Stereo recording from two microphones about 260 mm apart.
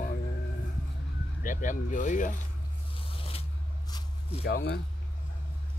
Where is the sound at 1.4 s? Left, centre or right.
Left.